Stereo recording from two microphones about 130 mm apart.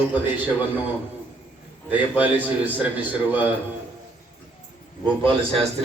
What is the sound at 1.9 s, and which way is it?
Speech, 10° right (ahead or behind).